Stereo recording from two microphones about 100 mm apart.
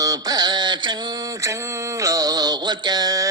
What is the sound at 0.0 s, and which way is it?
Mantra, 40° right (ahead or behind).